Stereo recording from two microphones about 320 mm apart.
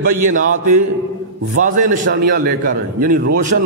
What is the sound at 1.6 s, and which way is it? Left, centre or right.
A man's voice, right.